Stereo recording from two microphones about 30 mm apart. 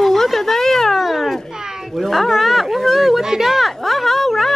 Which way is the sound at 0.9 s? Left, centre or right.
Centre.